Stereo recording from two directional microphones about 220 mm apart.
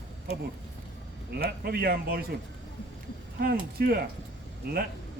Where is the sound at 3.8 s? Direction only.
45° right (ahead or behind).